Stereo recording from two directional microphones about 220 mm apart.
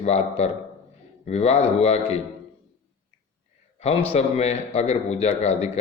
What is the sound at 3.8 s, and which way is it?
A man's voice, 30° left (ahead or behind).